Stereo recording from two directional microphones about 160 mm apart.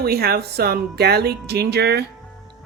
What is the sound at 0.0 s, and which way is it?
Speech, 75° right (ahead or behind).